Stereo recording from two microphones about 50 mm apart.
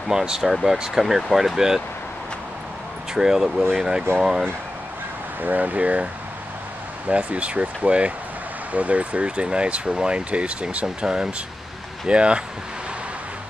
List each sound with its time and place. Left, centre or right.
0.1 s speech: centre
3.2 s speech: centre
5.4 s speech: right
7.1 s speech: right